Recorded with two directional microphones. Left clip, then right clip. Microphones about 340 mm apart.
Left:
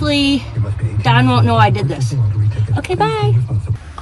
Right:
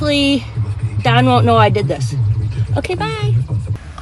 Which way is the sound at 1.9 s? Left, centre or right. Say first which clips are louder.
Right 3 dB; centre.